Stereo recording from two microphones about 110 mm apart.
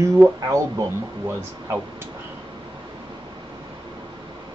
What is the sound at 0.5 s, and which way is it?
Speech, 25° right (ahead or behind).